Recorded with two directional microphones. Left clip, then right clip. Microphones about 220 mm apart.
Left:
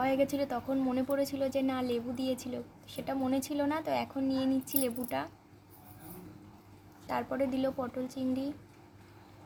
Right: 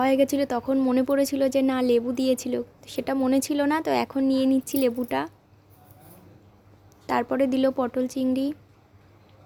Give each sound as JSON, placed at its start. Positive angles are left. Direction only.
{"t": 0.0, "sound": "speech", "side_deg": -35}
{"t": 7.1, "sound": "speech", "side_deg": -40}